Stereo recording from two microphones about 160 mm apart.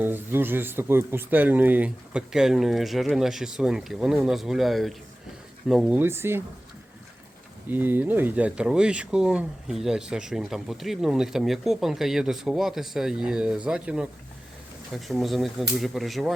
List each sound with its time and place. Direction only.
0.0 s speech: 15° right (ahead or behind)
6.0 s speech: 15° right (ahead or behind)
7.7 s speech: 10° right (ahead or behind)